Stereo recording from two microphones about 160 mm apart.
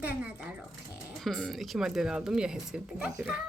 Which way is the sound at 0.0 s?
10° right (ahead or behind).